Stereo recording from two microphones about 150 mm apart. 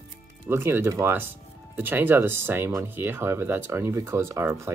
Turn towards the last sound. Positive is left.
turn(degrees=-15)  # may be behind; listen again after turning